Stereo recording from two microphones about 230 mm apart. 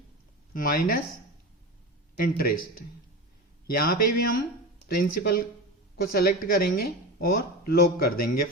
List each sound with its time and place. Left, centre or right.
0.5 s speech: left
2.1 s speech: left